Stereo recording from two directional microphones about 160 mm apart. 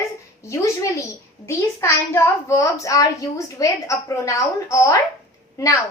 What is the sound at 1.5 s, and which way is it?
A child's voice, 15° left (ahead or behind).